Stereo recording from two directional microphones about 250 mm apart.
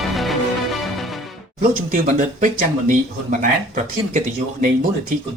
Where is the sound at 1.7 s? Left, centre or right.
Right.